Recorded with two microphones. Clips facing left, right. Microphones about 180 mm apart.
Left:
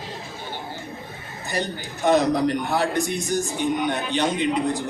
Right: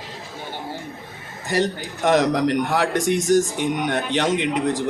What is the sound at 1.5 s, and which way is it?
Speech, 90° right.